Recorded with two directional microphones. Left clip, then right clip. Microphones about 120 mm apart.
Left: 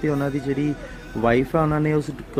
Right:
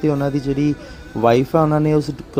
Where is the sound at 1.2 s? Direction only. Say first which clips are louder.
Right 5 dB; 25° right (ahead or behind).